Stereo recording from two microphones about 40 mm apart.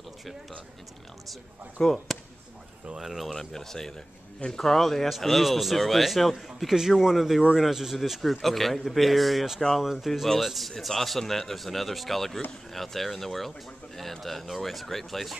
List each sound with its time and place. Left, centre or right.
1.8 s speech: centre
3.0 s speech: centre
3.3 s speech: centre
6.7 s a man's voice: centre